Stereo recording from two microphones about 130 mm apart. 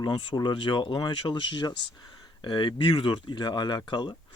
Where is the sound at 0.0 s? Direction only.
35° left (ahead or behind).